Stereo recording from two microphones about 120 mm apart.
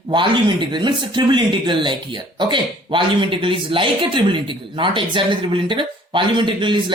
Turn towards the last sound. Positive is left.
turn(degrees=-45)  # may be behind; listen again after turning